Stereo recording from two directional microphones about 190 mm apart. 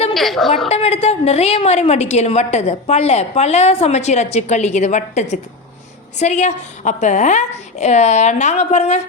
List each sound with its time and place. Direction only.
0.1 s a woman's voice: centre (ahead or behind)
0.7 s a woman's voice: 30° left (ahead or behind)